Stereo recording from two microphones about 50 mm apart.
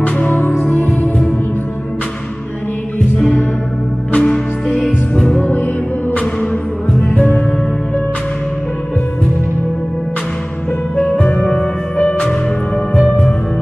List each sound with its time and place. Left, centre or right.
0.0 s music: left
4.1 s music: centre
5.2 s music: left
7.0 s music: left
11.0 s music: left